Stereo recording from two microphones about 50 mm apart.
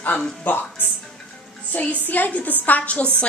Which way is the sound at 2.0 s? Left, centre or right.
Left.